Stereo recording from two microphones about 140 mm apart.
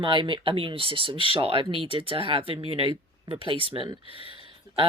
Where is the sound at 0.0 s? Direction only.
35° right (ahead or behind).